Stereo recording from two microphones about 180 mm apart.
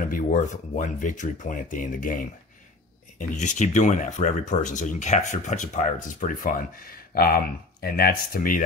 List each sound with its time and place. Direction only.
0.1 s speech: 45° left (ahead or behind)
3.3 s speech: 40° left (ahead or behind)